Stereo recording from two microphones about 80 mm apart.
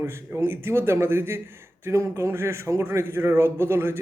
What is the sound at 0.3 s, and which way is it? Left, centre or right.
A man's voice, right.